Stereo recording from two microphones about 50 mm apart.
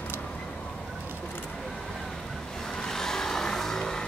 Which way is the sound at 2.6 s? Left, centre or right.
Centre.